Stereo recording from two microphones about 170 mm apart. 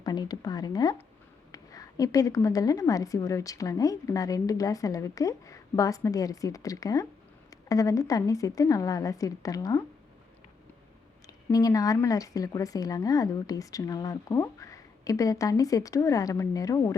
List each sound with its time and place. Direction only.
0.0 s a woman's voice: 25° left (ahead or behind)
11.5 s a woman's voice: 20° left (ahead or behind)